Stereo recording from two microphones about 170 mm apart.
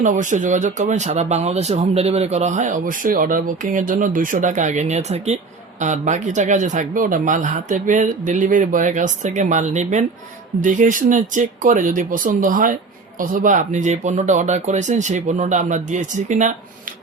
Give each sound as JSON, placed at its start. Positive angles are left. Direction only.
{"t": 0.0, "sound": "speech", "side_deg": -45}